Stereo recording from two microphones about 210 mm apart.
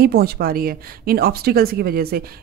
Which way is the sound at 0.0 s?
45° right (ahead or behind).